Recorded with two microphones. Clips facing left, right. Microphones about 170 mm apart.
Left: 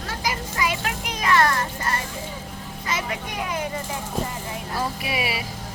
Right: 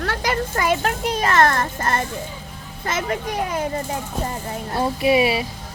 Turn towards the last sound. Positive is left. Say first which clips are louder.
# right 10 dB
turn(degrees=-25)  # may be behind; listen again after turning